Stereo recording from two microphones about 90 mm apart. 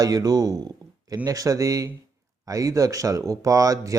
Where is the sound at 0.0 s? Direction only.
45° right (ahead or behind).